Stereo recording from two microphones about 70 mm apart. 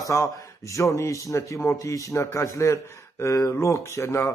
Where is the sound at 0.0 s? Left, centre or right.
Left.